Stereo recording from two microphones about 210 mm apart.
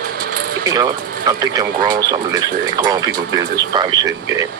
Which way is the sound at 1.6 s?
15° right (ahead or behind).